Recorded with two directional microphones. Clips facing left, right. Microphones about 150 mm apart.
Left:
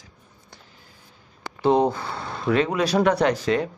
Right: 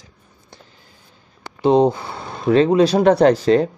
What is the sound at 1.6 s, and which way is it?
Speech, 20° right (ahead or behind).